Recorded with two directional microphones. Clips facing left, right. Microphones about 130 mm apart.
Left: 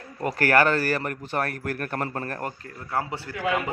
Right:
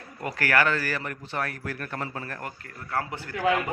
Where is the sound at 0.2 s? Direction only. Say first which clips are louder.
Left 4 dB; 40° left (ahead or behind).